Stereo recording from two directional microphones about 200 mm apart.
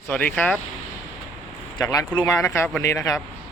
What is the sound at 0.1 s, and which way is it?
Speech, 10° left (ahead or behind).